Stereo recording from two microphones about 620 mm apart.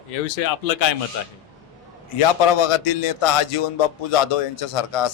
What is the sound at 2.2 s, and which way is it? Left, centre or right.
A man's voice, left.